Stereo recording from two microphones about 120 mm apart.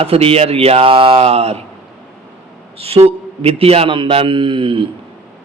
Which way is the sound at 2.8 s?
55° right (ahead or behind).